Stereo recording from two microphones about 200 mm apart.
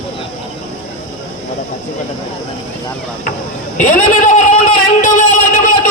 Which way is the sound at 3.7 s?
40° left (ahead or behind).